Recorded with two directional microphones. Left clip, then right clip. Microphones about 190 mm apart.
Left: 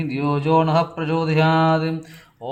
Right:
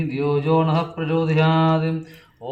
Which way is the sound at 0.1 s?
50° left (ahead or behind).